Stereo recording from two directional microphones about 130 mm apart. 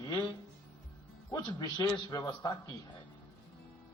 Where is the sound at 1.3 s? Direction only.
30° left (ahead or behind).